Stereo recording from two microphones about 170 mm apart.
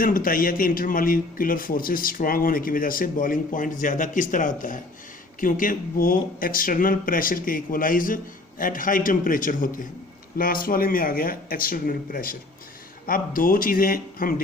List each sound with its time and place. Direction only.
0.0 s a man's voice: 55° left (ahead or behind)